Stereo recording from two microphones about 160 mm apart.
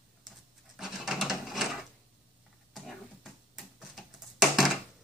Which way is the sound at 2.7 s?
Centre (ahead or behind).